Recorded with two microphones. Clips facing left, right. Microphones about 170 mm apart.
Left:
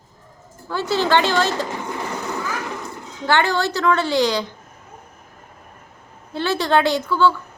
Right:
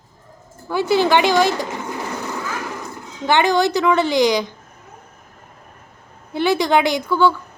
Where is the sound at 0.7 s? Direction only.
15° right (ahead or behind).